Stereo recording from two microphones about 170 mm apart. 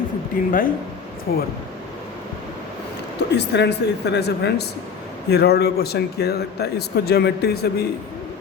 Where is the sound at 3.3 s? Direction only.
90° left.